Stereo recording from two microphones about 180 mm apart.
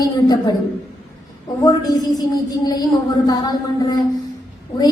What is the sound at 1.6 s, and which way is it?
Speech, 20° left (ahead or behind).